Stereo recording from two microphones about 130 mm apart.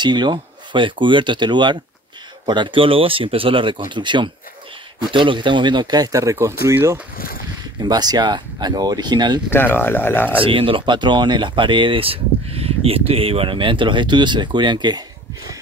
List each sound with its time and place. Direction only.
0.0 s speech: 35° right (ahead or behind)
7.8 s speech: 30° right (ahead or behind)
9.5 s speech: 15° left (ahead or behind)
10.4 s speech: 40° right (ahead or behind)